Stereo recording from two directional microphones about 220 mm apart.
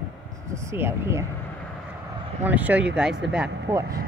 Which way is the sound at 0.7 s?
10° right (ahead or behind).